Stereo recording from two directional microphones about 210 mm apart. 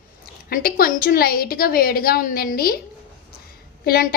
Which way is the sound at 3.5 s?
45° left (ahead or behind).